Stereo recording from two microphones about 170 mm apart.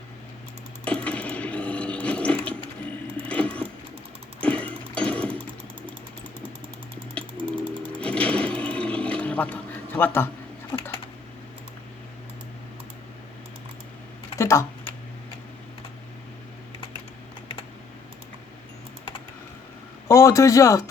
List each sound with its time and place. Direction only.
0.9 s coin: 5° left (ahead or behind)
3.2 s keys jangling: 10° left (ahead or behind)
4.4 s sewing machine: 10° left (ahead or behind)
7.1 s sewing machine: 5° left (ahead or behind)
10.7 s typing: 15° left (ahead or behind)
14.3 s typing: 15° left (ahead or behind)
20.1 s speech: 20° left (ahead or behind)